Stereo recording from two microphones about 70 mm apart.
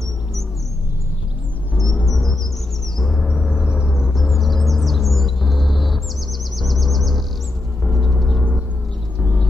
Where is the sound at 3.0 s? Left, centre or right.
Centre.